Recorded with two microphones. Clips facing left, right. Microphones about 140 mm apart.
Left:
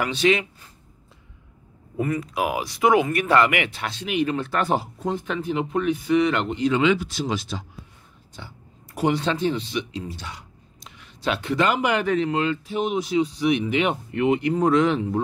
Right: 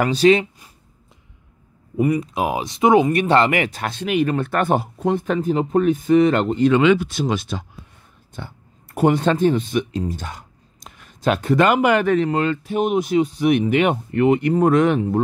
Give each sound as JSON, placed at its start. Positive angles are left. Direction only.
{"t": 0.0, "sound": "speech", "side_deg": -40}
{"t": 2.0, "sound": "speech", "side_deg": -15}
{"t": 6.6, "sound": "speech", "side_deg": -55}